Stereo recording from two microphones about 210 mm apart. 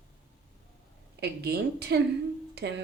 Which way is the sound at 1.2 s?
50° right (ahead or behind).